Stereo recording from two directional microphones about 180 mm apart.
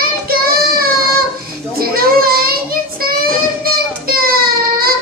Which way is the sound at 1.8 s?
55° right (ahead or behind).